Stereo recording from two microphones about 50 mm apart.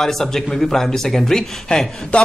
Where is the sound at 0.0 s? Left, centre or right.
Centre.